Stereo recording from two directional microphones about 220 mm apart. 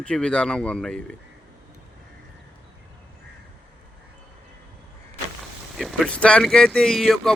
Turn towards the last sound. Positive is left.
turn(degrees=0)  # may be behind; listen again after turning